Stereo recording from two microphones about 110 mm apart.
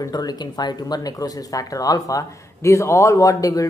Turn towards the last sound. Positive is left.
turn(degrees=30)  # may be behind; listen again after turning